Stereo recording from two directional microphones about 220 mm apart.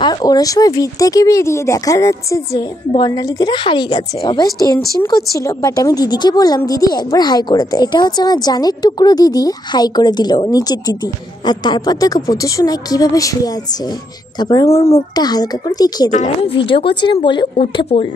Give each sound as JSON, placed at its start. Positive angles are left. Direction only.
{"t": 0.0, "sound": "a woman's voice", "side_deg": 20}
{"t": 16.1, "sound": "a woman's voice", "side_deg": 35}